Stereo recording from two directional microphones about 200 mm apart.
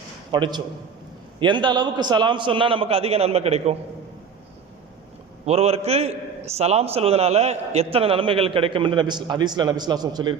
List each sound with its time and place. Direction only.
0.3 s a man's voice: 25° right (ahead or behind)
5.5 s a man's voice: 30° right (ahead or behind)